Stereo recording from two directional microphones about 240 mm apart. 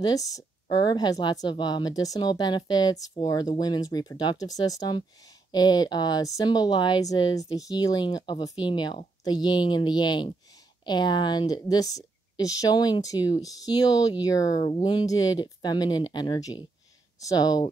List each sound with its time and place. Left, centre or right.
0.0 s speech: centre